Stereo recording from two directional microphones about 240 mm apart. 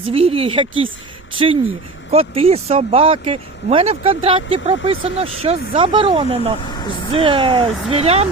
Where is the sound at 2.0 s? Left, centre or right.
Right.